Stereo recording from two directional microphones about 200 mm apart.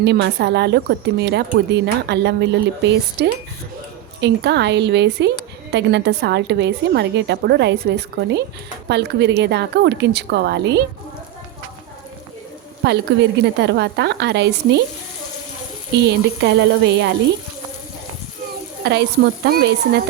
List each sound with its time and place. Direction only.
0.0 s a woman's voice: 55° right (ahead or behind)
12.8 s a woman's voice: 55° right (ahead or behind)
16.0 s a woman's voice: 60° right (ahead or behind)
18.8 s a woman's voice: 55° right (ahead or behind)